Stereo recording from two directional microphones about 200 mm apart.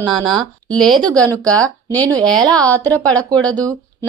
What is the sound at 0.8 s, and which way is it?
Speech, 25° right (ahead or behind).